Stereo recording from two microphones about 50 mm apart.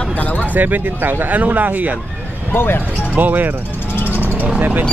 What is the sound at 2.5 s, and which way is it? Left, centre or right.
Speech, left.